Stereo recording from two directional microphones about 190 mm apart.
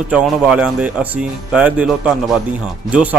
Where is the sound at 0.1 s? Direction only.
5° right (ahead or behind).